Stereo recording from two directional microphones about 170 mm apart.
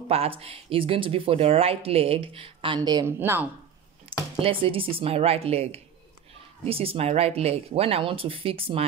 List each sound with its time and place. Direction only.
0.1 s speech: 35° right (ahead or behind)
3.2 s speech: 10° right (ahead or behind)
4.4 s speech: 30° right (ahead or behind)